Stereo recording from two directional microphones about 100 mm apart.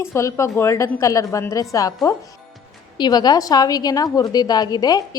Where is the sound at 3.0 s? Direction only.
45° left (ahead or behind).